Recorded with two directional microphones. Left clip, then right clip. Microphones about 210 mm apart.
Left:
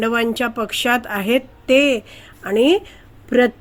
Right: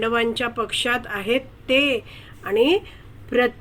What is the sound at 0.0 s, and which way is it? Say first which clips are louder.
A woman's voice: left 3 dB; 45° left (ahead or behind).